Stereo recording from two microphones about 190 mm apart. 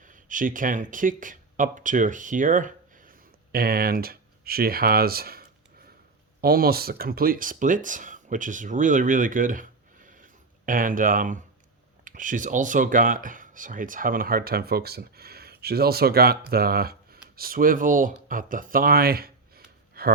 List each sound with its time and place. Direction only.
0.0 s speech: 45° right (ahead or behind)